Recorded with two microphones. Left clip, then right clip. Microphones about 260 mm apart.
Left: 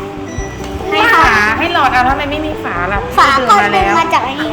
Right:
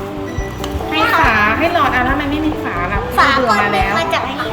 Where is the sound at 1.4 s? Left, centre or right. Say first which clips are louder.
Left 2 dB; centre.